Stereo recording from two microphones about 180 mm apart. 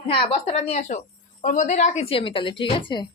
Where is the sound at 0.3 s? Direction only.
35° left (ahead or behind).